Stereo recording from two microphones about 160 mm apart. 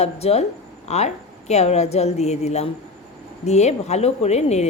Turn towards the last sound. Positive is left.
turn(degrees=45)  # may be behind; listen again after turning